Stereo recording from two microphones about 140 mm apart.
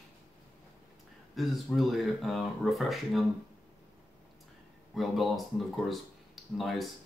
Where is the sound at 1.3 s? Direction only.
Centre (ahead or behind).